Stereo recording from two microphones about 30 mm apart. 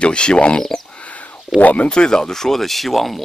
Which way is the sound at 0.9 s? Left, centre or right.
Left.